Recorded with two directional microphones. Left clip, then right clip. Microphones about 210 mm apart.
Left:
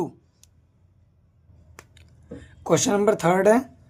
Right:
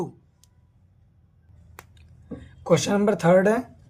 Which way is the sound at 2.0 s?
35° left (ahead or behind).